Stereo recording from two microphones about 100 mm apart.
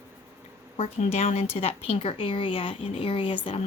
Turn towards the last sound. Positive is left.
turn(degrees=80)